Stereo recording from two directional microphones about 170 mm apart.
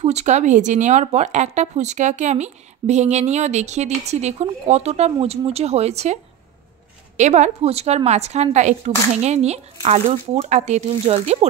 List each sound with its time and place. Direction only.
0.0 s speech: 40° right (ahead or behind)
7.2 s speech: 45° right (ahead or behind)